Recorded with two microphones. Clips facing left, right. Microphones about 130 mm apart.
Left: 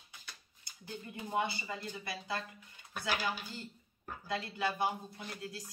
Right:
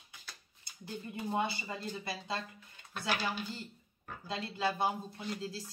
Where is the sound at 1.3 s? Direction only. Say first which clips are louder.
Left 1 dB; 25° right (ahead or behind).